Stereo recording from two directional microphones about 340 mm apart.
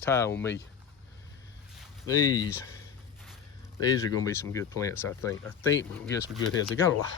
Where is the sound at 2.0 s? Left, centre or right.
Centre.